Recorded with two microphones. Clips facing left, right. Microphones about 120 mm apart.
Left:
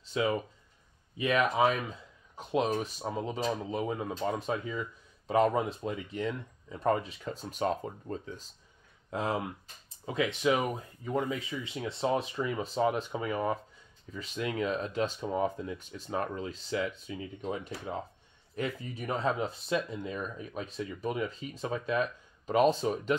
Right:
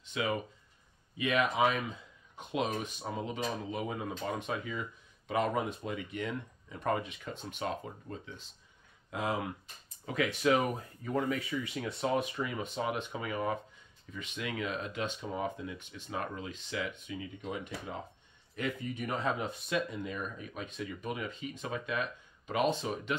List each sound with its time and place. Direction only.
0.0 s speech: 35° left (ahead or behind)